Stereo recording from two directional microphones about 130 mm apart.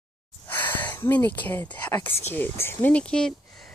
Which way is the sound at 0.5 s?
15° left (ahead or behind).